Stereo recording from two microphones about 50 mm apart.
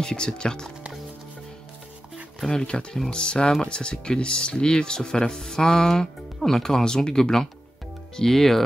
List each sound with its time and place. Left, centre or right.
0.0 s speech: centre
2.5 s speech: centre